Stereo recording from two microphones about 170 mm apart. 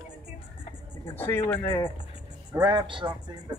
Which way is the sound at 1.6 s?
30° left (ahead or behind).